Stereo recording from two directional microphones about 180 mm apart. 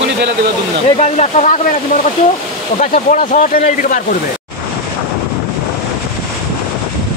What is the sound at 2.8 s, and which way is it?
Speech, 35° left (ahead or behind).